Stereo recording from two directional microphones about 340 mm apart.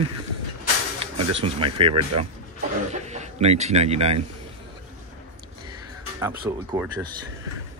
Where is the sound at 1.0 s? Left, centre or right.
Centre.